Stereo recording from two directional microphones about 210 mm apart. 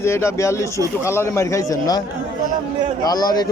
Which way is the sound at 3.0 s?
20° left (ahead or behind).